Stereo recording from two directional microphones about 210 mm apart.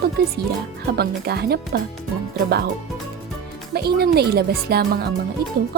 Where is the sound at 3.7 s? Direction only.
50° right (ahead or behind).